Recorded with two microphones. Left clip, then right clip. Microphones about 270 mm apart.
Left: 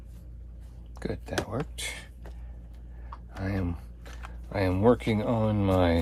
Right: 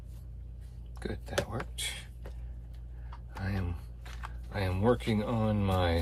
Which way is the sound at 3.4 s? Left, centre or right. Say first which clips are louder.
Left 6 dB; left.